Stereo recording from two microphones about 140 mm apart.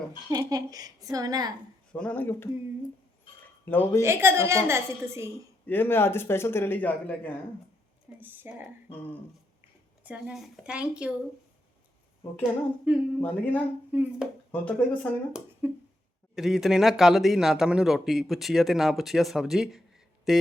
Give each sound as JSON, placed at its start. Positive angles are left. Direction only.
{"t": 0.3, "sound": "a woman's voice", "side_deg": -25}
{"t": 1.9, "sound": "a man's voice", "side_deg": 10}
{"t": 3.7, "sound": "a man's voice", "side_deg": 15}
{"t": 4.0, "sound": "a woman's voice", "side_deg": -20}
{"t": 5.6, "sound": "a man's voice", "side_deg": 15}
{"t": 8.2, "sound": "a woman's voice", "side_deg": -15}
{"t": 8.9, "sound": "a sound", "side_deg": 40}
{"t": 10.0, "sound": "a woman's voice", "side_deg": -10}
{"t": 12.4, "sound": "a woman's voice", "side_deg": -10}
{"t": 13.2, "sound": "a man's voice", "side_deg": 10}
{"t": 13.9, "sound": "a woman's voice", "side_deg": -10}
{"t": 14.5, "sound": "a man's voice", "side_deg": 10}
{"t": 15.6, "sound": "a woman's voice", "side_deg": -15}
{"t": 16.3, "sound": "speech", "side_deg": -5}